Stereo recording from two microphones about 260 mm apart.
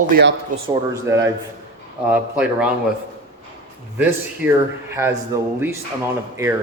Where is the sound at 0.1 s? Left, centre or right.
Right.